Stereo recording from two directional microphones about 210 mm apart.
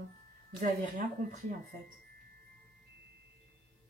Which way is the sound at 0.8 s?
35° right (ahead or behind).